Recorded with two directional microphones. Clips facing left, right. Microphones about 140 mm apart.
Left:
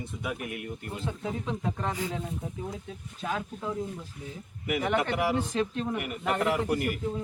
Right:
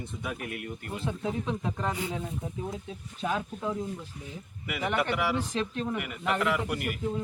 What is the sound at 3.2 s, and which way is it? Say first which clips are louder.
Speech: right 2 dB; 5° right (ahead or behind).